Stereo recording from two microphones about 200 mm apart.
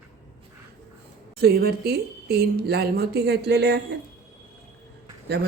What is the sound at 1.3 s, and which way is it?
Speech, 50° right (ahead or behind).